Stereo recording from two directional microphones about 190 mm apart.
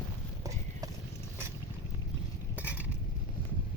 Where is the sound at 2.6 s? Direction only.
10° right (ahead or behind).